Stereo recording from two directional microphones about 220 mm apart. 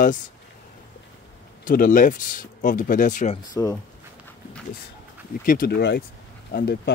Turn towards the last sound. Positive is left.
turn(degrees=45)  # may be behind; listen again after turning